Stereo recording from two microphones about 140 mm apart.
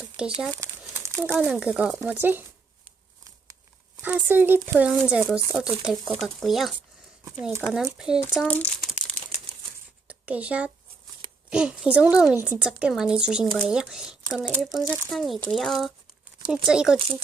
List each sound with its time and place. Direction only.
0.2 s speech: 10° right (ahead or behind)
0.6 s crumpling: 20° right (ahead or behind)
1.4 s speech: 5° right (ahead or behind)
4.0 s speech: 15° right (ahead or behind)
8.4 s crumpling: 10° left (ahead or behind)
10.1 s a sound: 10° right (ahead or behind)
11.5 s speech: 5° right (ahead or behind)
14.6 s speech: centre (ahead or behind)